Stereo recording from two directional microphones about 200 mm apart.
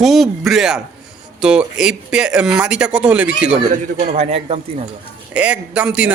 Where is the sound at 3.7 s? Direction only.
40° right (ahead or behind).